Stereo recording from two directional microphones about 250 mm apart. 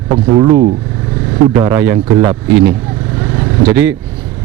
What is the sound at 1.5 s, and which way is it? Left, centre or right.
Speech, centre.